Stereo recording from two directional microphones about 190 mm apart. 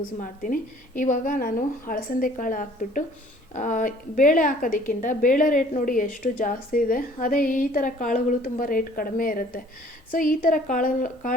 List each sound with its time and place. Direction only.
0.4 s a woman's voice: 45° left (ahead or behind)